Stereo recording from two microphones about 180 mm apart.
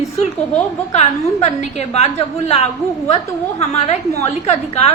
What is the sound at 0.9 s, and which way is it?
A woman's voice, 35° left (ahead or behind).